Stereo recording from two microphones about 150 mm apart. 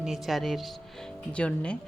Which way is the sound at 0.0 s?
Centre (ahead or behind).